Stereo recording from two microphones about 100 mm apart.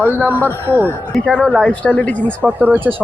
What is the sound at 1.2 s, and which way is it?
Speech, centre (ahead or behind).